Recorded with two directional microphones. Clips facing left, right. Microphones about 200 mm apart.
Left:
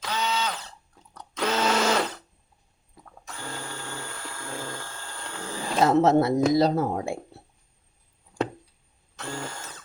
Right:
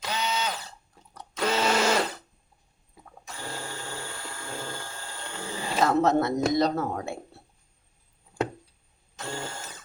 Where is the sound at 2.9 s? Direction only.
10° right (ahead or behind).